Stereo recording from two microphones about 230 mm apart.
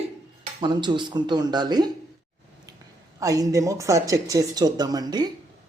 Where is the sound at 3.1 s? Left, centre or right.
Centre.